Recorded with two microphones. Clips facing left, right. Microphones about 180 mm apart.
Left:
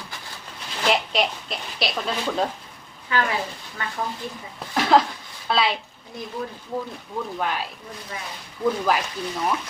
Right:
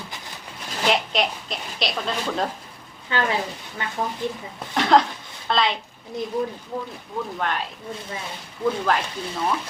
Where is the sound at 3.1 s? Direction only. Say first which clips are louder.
Right 1 dB; 30° right (ahead or behind).